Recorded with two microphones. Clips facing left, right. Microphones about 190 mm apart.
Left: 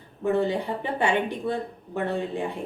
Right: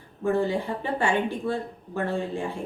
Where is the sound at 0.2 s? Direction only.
20° left (ahead or behind).